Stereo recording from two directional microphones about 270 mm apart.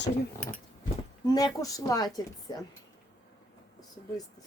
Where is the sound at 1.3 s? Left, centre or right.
Centre.